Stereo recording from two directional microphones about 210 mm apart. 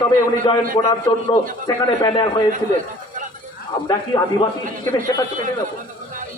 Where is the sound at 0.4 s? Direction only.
25° left (ahead or behind).